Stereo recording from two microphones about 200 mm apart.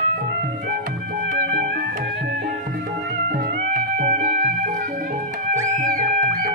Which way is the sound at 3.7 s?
40° right (ahead or behind).